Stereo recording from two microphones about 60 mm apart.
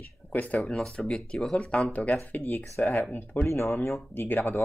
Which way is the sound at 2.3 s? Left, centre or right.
Left.